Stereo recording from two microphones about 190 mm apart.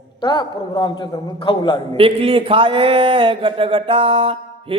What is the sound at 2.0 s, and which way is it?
A man's voice, 30° right (ahead or behind).